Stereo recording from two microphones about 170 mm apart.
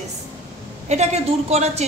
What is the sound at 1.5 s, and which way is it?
Speech, 40° right (ahead or behind).